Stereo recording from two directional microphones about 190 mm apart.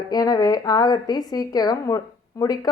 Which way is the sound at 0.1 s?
20° left (ahead or behind).